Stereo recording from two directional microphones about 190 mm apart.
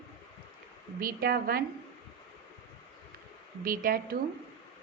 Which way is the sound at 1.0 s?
50° right (ahead or behind).